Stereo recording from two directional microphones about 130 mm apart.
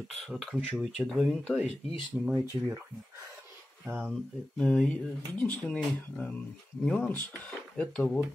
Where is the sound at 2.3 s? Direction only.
20° right (ahead or behind).